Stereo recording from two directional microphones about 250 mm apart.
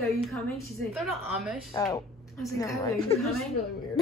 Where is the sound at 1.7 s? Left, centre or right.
Centre.